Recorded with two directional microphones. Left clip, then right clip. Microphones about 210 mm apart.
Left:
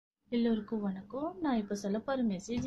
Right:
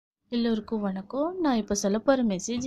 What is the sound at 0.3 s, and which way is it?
Speech, 40° right (ahead or behind).